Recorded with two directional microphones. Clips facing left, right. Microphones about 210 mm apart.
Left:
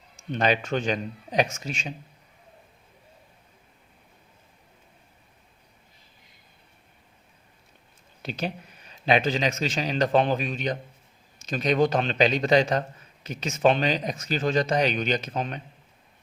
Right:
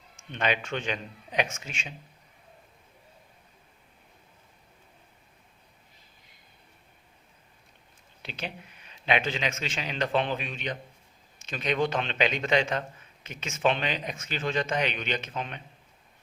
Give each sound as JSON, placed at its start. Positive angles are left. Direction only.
{"t": 0.2, "sound": "a man's voice", "side_deg": 35}
{"t": 8.2, "sound": "a man's voice", "side_deg": 40}